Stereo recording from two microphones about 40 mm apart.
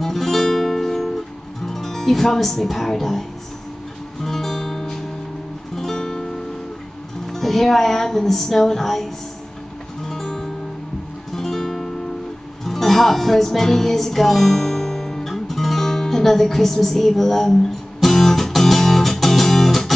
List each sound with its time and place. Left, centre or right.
0.0 s music: centre
1.7 s speech: centre
4.2 s music: centre